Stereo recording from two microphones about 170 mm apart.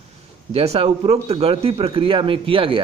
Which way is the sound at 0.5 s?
35° right (ahead or behind).